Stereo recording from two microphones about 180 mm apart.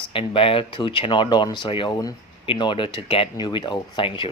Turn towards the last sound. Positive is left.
turn(degrees=25)  # may be behind; listen again after turning